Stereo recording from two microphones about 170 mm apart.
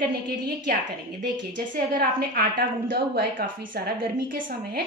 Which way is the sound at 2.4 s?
65° right (ahead or behind).